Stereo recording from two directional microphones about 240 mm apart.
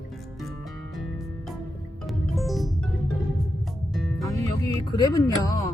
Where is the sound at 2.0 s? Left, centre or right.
Centre.